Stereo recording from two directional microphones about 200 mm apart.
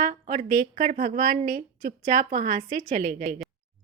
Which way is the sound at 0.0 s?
40° right (ahead or behind).